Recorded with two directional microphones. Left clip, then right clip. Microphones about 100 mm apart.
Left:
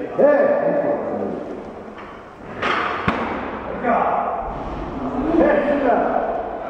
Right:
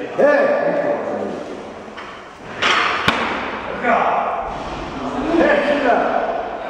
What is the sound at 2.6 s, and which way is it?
Arrow, 25° right (ahead or behind).